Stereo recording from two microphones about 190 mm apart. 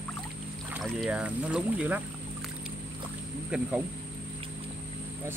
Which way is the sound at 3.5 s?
5° right (ahead or behind).